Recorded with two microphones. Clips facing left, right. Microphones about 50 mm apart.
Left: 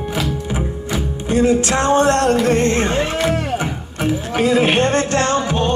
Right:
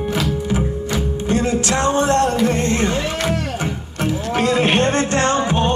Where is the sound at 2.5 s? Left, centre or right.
Left.